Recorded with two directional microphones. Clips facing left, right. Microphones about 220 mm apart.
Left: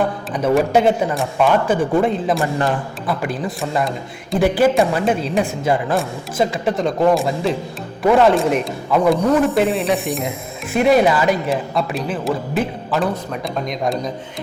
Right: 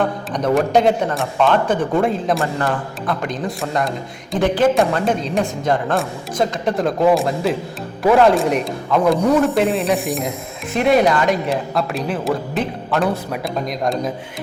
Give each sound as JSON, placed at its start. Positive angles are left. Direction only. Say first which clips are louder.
{"t": 0.0, "sound": "speech", "louder": "even", "side_deg": 5}
{"t": 2.4, "sound": "a man's voice", "louder": "left 1 dB", "side_deg": 20}
{"t": 3.1, "sound": "speech", "louder": "left 1 dB", "side_deg": 5}